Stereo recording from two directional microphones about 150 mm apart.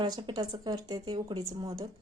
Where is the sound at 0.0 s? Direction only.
30° right (ahead or behind).